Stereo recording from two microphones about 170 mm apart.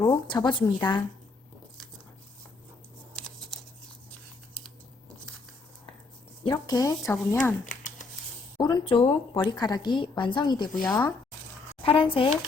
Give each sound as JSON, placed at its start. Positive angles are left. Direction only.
{"t": 0.0, "sound": "a woman's voice", "side_deg": 25}
{"t": 3.2, "sound": "a sound", "side_deg": 5}
{"t": 6.4, "sound": "speech", "side_deg": 25}
{"t": 7.1, "sound": "speech", "side_deg": 10}
{"t": 7.6, "sound": "a sound", "side_deg": 50}
{"t": 8.5, "sound": "a woman's voice", "side_deg": 25}
{"t": 11.8, "sound": "speech", "side_deg": 30}